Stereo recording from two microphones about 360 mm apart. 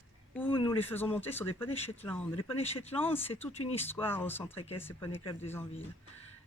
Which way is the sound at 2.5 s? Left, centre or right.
Centre.